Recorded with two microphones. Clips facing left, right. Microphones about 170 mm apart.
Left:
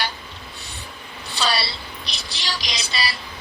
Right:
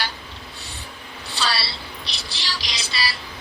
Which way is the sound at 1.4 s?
20° left (ahead or behind).